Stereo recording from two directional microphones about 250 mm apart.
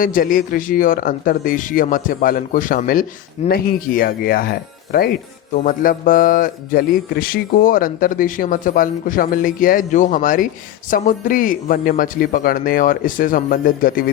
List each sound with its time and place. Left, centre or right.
0.0 s a man's voice: left